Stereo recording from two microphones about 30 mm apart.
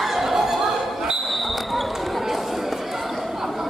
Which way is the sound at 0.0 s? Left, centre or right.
Centre.